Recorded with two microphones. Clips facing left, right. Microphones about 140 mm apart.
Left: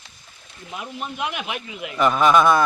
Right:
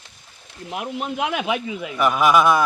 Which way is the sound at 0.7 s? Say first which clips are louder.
Right 5 dB; 80° right.